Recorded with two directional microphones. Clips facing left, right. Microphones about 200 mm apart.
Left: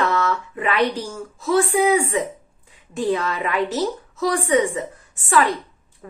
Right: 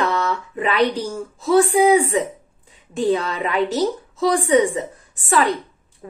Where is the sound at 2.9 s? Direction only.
30° right (ahead or behind).